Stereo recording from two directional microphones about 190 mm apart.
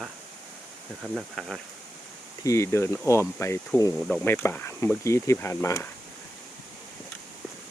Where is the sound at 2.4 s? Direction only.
15° left (ahead or behind).